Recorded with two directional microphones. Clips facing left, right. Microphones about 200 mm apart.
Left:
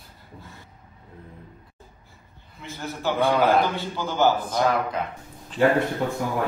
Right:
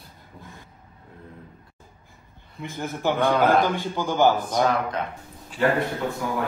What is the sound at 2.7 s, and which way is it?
Speech, 50° right (ahead or behind).